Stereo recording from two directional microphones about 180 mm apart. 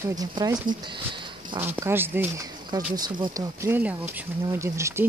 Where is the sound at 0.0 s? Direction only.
20° right (ahead or behind).